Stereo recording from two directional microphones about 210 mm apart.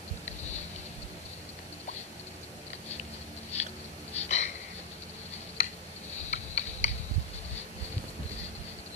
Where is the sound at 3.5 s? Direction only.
30° left (ahead or behind).